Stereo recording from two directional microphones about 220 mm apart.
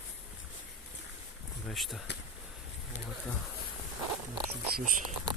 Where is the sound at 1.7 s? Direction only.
Centre (ahead or behind).